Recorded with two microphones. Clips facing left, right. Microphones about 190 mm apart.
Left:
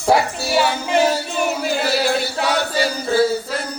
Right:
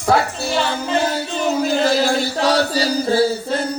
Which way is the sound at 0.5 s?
10° left (ahead or behind).